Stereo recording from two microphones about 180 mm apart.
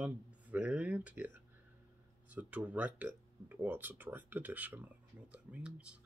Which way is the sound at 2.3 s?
10° right (ahead or behind).